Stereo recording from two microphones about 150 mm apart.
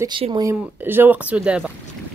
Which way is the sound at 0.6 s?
15° right (ahead or behind).